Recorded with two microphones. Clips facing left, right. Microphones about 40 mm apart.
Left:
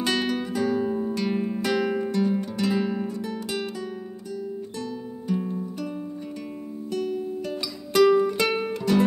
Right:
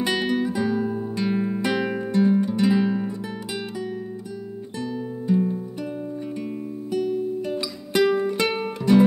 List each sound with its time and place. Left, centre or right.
0.0 s music: centre
0.8 s music: centre
1.1 s music: centre
2.0 s music: right
4.7 s music: centre
6.9 s guitar: centre
7.4 s music: centre